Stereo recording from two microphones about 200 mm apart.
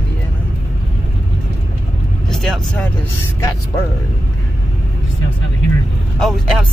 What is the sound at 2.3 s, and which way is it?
Speech, 5° left (ahead or behind).